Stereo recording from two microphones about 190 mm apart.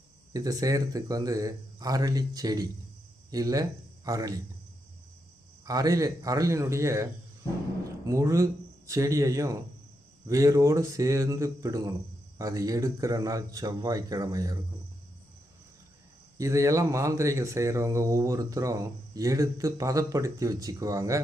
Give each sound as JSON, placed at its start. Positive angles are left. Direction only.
{"t": 0.3, "sound": "speech", "side_deg": -20}
{"t": 5.6, "sound": "speech", "side_deg": -20}
{"t": 16.4, "sound": "speech", "side_deg": -15}